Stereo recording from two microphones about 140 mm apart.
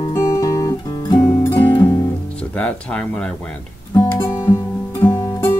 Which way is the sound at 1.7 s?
35° left (ahead or behind).